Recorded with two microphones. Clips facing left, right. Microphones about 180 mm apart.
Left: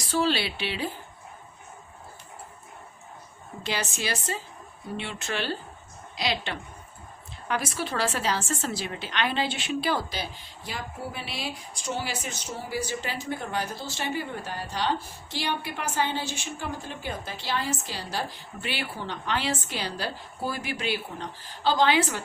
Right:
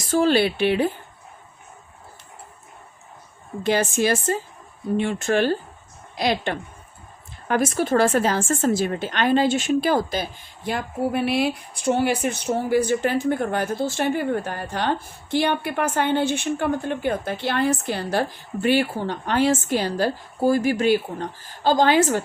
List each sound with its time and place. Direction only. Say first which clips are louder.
0.0 s a woman's voice: right 8 dB; 50° right (ahead or behind)
3.6 s a woman's voice: right 11 dB; 50° right (ahead or behind)